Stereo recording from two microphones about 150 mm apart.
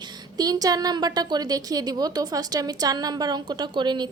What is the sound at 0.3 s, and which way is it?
A woman's voice, 25° right (ahead or behind).